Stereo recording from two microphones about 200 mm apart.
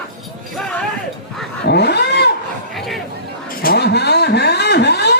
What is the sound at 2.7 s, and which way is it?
Chatter, centre (ahead or behind).